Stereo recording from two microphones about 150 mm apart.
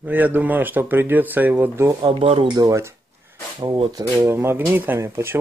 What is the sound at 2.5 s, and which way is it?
Speech, 20° right (ahead or behind).